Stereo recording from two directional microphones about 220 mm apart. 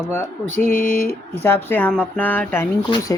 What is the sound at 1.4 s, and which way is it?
Speech, 10° left (ahead or behind).